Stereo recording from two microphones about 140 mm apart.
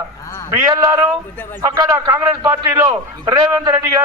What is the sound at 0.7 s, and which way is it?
A man's voice, 25° right (ahead or behind).